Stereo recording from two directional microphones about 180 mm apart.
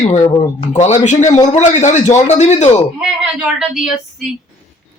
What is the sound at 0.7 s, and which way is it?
Speech, 40° left (ahead or behind).